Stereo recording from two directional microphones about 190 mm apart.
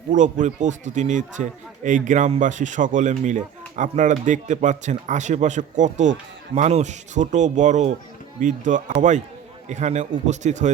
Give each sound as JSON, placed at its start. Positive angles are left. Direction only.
{"t": 0.1, "sound": "a man's voice", "side_deg": -40}